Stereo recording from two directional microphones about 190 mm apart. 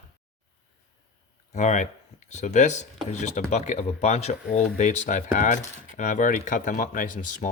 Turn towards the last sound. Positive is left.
turn(degrees=45)  # may be behind; listen again after turning